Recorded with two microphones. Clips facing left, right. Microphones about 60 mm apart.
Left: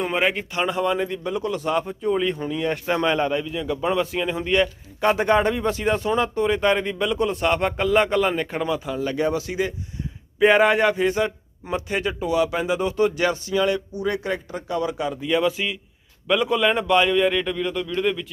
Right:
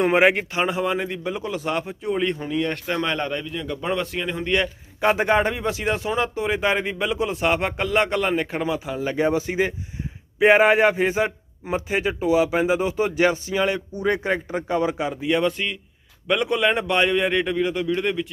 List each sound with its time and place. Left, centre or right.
0.0 s a man's voice: right
0.7 s a man's voice: centre
4.9 s a man's voice: centre; by 9.7 s right
10.4 s a man's voice: centre
13.9 s a man's voice: right; by 15.3 s centre
15.3 s speech: centre